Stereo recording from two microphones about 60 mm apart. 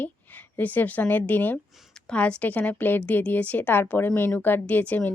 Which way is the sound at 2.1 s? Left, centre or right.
Centre.